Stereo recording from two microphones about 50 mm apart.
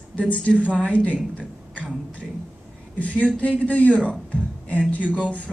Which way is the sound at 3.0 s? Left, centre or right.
Left.